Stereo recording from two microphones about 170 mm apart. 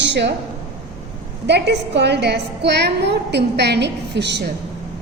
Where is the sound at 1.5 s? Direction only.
90° right.